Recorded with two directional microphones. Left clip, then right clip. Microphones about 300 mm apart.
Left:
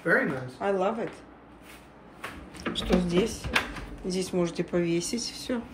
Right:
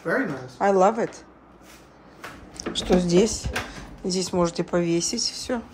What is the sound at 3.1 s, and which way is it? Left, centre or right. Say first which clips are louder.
Speech: right 7 dB; right.